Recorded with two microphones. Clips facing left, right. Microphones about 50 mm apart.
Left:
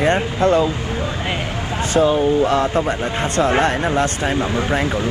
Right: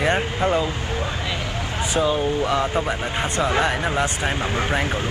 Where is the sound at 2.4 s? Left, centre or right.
Left.